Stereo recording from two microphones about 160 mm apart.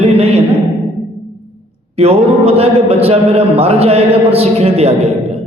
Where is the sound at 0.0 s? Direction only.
40° right (ahead or behind).